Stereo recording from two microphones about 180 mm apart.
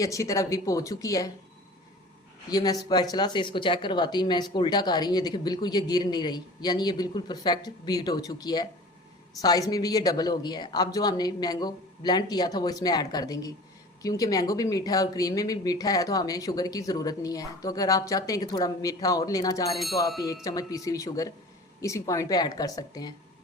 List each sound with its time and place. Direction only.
0.0 s speech: 15° left (ahead or behind)
2.5 s speech: 20° left (ahead or behind)
19.7 s a sound: centre (ahead or behind)
20.2 s speech: 20° left (ahead or behind)